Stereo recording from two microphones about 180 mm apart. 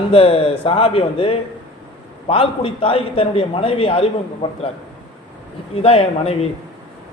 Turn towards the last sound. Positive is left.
turn(degrees=35)  # may be behind; listen again after turning